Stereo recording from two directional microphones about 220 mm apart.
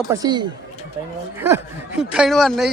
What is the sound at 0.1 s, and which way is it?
A man's voice, 15° right (ahead or behind).